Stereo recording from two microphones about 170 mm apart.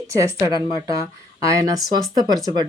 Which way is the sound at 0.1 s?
20° right (ahead or behind).